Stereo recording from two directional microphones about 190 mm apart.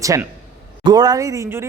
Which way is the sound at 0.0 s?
15° right (ahead or behind).